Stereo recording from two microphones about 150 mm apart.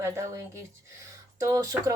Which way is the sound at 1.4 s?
20° right (ahead or behind).